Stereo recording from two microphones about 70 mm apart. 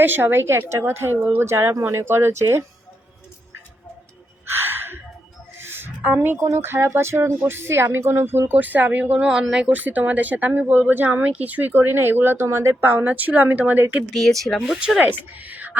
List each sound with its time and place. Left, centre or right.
0.0 s speech: right
4.4 s a sound: right
6.4 s speech: right; by 9.6 s centre
9.6 s speech: right
13.1 s speech: right
14.1 s speech: centre
14.6 s speech: centre
15.4 s speech: right